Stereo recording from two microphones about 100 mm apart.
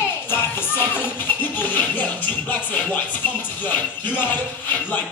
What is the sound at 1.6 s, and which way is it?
Speech, 20° left (ahead or behind).